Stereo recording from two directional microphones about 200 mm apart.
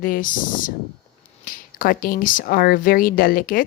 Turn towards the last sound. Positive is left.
turn(degrees=45)  # may be behind; listen again after turning